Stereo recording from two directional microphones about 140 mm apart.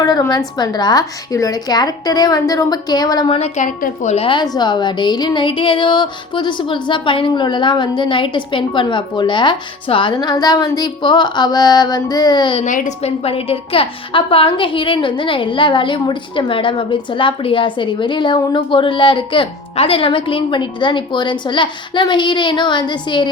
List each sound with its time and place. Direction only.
0.0 s a woman's voice: 30° left (ahead or behind)
3.3 s a woman's voice: 50° left (ahead or behind); by 12.5 s 30° left (ahead or behind)
12.5 s a woman's voice: 65° left (ahead or behind); by 23.3 s 35° left (ahead or behind)